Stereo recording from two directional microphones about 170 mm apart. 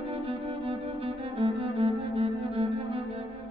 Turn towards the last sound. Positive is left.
turn(degrees=-35)  # may be behind; listen again after turning